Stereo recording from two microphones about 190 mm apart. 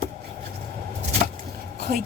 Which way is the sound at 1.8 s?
55° right (ahead or behind).